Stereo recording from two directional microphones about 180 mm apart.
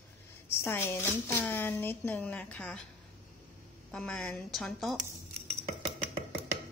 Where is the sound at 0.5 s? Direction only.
15° left (ahead or behind).